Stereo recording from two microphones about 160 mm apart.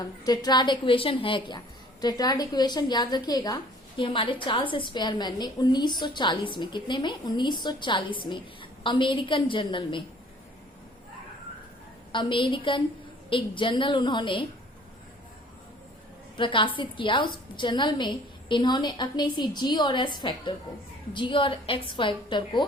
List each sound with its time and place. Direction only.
0.0 s a woman's voice: 25° left (ahead or behind)
12.1 s a woman's voice: 30° left (ahead or behind)
16.4 s a woman's voice: 30° left (ahead or behind)